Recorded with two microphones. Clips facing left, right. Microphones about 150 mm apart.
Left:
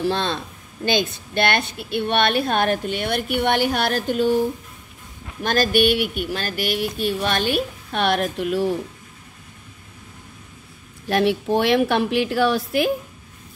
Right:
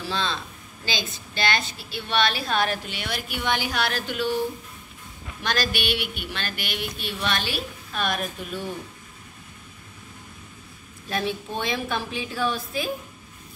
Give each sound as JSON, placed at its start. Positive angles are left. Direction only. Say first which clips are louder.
{"t": 0.0, "sound": "a woman's voice", "louder": "left 6 dB", "side_deg": 55}
{"t": 5.4, "sound": "speech", "louder": "left 9 dB", "side_deg": 45}
{"t": 11.1, "sound": "a woman's voice", "louder": "left 9 dB", "side_deg": 75}